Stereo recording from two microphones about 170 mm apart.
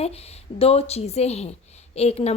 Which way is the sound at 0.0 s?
35° left (ahead or behind).